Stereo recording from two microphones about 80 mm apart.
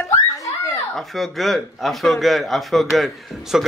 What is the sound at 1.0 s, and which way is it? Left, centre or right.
A man's voice, centre.